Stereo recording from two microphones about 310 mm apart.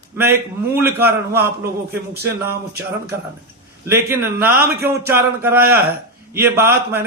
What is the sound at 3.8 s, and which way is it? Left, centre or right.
A man's voice, centre.